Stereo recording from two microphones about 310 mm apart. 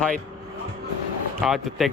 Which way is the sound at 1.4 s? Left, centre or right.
Centre.